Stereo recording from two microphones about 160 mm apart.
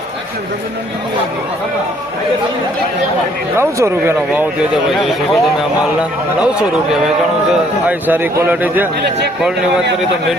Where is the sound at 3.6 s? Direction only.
15° right (ahead or behind).